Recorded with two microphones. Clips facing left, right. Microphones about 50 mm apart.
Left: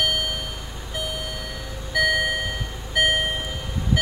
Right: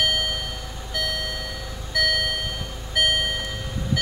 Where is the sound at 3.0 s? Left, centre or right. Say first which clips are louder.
Left 1 dB; centre.